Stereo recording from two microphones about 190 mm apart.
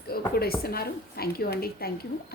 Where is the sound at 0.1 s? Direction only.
55° left (ahead or behind).